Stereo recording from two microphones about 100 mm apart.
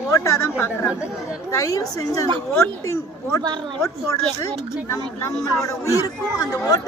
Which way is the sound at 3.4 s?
50° right (ahead or behind).